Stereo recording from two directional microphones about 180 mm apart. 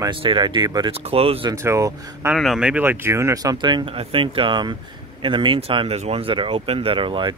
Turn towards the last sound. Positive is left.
turn(degrees=-25)  # may be behind; listen again after turning